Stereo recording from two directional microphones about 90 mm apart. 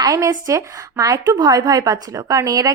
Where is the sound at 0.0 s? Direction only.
45° right (ahead or behind).